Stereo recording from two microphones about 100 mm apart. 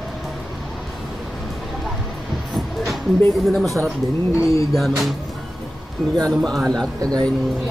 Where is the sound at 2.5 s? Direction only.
Centre (ahead or behind).